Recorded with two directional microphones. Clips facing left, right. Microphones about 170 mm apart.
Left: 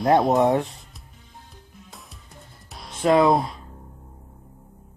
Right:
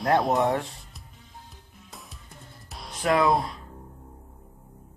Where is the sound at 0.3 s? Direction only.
20° left (ahead or behind).